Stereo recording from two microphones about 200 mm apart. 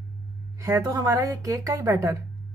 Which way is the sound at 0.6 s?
15° right (ahead or behind).